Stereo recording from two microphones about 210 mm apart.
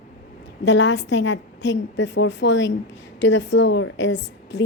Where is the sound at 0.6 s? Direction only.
60° left (ahead or behind).